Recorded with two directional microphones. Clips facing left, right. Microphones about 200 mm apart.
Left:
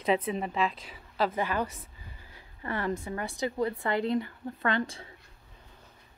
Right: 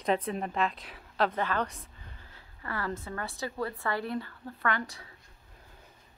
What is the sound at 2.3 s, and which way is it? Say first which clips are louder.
A woman's voice: left 4 dB; 20° left (ahead or behind).